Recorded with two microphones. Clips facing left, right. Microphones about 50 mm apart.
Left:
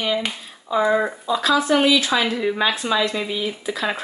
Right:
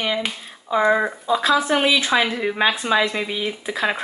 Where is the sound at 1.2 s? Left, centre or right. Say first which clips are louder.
Right 2 dB; centre.